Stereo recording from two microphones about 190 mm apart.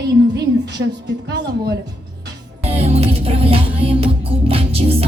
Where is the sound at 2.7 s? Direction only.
30° right (ahead or behind).